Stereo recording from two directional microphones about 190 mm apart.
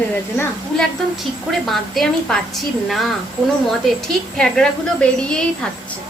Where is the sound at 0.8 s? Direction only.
Centre (ahead or behind).